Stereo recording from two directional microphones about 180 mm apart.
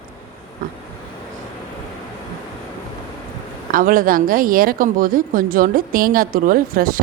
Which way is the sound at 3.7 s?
50° right (ahead or behind).